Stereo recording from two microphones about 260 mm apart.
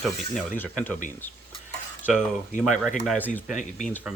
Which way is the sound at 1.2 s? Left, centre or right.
Centre.